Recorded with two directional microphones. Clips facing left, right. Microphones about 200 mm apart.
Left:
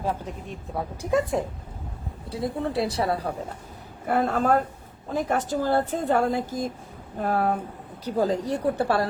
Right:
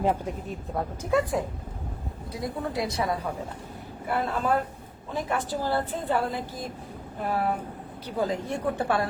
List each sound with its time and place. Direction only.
0.0 s speech: 10° right (ahead or behind)
2.3 s speech: 30° left (ahead or behind)
4.1 s a woman's voice: 45° left (ahead or behind)